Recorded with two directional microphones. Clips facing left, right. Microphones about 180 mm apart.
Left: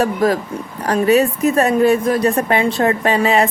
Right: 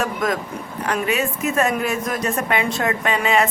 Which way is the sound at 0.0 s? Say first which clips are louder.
Left 6 dB; 35° left (ahead or behind).